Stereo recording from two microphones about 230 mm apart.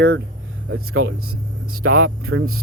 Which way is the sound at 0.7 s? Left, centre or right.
Right.